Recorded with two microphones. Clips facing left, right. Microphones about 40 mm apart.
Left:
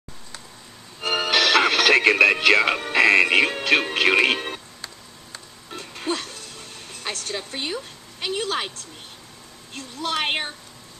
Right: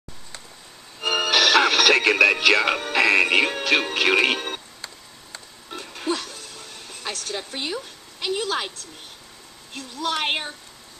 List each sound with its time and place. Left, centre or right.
1.0 s music: left
3.6 s speech: left
5.8 s a sound: left
10.0 s speech: left